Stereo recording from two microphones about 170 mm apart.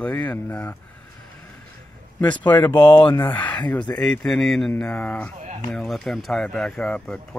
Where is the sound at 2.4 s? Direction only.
10° left (ahead or behind).